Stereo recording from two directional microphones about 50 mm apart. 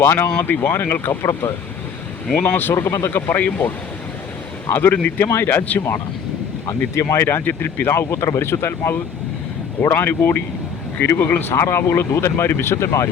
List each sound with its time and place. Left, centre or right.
0.0 s speech: left
0.3 s speech: left
1.2 s speech: left
2.3 s speech: left
2.7 s speech: left
3.1 s speech: left
4.7 s speech: left
5.2 s speech: left
6.9 s speech: left
7.4 s speech: left
7.9 s speech: left
11.5 s speech: left